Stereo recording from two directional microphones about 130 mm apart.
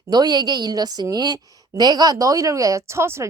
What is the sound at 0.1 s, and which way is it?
A woman's voice, 30° right (ahead or behind).